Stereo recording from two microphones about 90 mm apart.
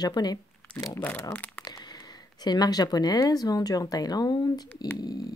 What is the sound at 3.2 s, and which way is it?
Speech, 45° left (ahead or behind).